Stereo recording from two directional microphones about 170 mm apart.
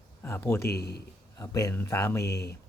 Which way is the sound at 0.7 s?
70° left (ahead or behind).